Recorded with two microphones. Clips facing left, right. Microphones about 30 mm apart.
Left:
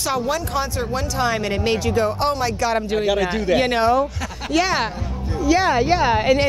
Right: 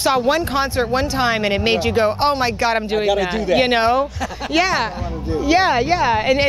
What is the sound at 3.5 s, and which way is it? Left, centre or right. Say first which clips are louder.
Speech: right 2 dB; right.